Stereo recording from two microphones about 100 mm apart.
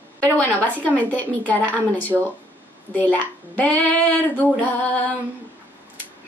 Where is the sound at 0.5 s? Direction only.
15° left (ahead or behind).